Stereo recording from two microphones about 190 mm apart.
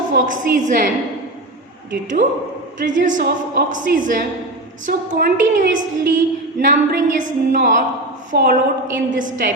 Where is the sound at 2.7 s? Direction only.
45° right (ahead or behind).